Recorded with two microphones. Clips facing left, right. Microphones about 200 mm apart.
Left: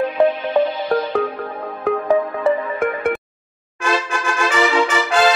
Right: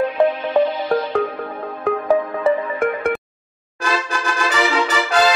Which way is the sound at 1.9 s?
Centre (ahead or behind).